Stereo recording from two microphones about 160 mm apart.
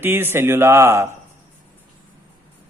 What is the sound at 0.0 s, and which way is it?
Speech, 15° right (ahead or behind).